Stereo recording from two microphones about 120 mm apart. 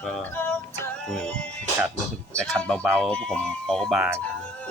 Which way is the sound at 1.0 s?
5° left (ahead or behind).